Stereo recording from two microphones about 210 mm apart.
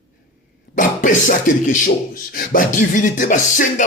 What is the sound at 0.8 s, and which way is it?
Music, 40° left (ahead or behind).